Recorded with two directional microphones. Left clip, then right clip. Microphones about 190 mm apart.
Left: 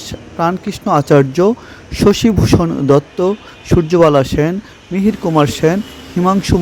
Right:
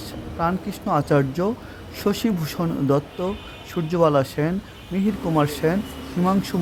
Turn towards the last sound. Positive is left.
turn(degrees=30)  # may be behind; listen again after turning